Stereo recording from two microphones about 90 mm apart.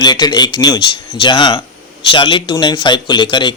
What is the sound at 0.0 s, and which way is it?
Speech, 50° left (ahead or behind).